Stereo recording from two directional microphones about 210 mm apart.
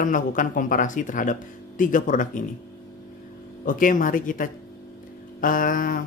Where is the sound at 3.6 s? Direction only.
40° left (ahead or behind).